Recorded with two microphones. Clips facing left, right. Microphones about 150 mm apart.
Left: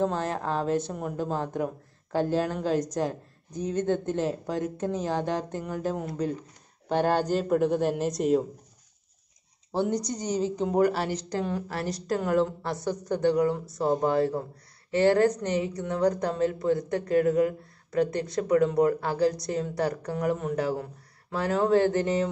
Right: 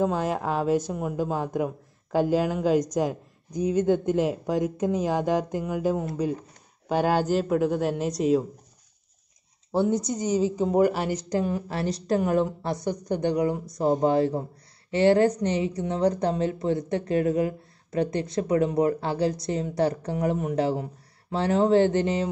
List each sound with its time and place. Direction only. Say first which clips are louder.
0.0 s a woman's voice: right 2 dB; 10° right (ahead or behind)
9.7 s a woman's voice: right 3 dB; 10° right (ahead or behind)
11.7 s a woman's voice: right 4 dB; 25° right (ahead or behind)